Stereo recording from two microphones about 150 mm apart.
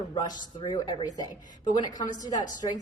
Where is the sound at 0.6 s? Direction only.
30° left (ahead or behind).